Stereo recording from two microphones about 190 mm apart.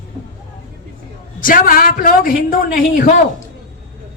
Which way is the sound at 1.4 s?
45° left (ahead or behind).